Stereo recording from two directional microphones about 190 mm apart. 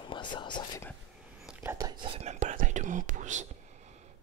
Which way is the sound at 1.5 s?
10° right (ahead or behind).